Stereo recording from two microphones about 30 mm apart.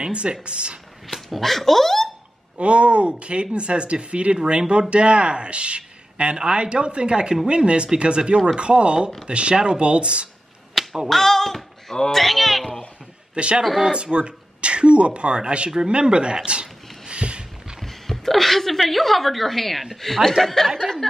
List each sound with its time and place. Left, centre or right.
0.0 s speech: right
1.0 s speech: centre
2.5 s speech: right
10.7 s a sound: centre
11.1 s a woman's voice: centre
13.3 s a man's voice: right
17.1 s a sound: right
17.8 s a sound: centre
18.9 s a woman's voice: centre